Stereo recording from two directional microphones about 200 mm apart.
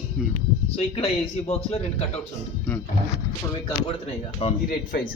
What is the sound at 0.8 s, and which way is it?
A man's voice, 30° left (ahead or behind).